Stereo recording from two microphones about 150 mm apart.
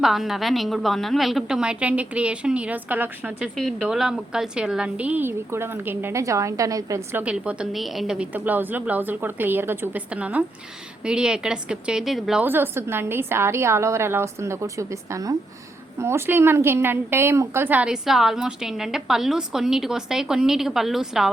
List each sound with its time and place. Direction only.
0.0 s a woman's voice: centre (ahead or behind)
12.5 s a woman's voice: 15° right (ahead or behind)